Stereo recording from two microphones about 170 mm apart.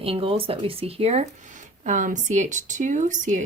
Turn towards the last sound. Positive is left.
turn(degrees=-45)  # may be behind; listen again after turning